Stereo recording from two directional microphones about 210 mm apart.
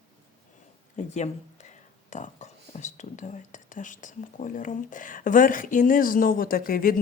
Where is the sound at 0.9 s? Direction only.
35° left (ahead or behind).